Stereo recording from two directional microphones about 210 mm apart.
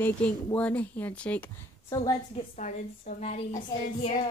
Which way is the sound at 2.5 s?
35° left (ahead or behind).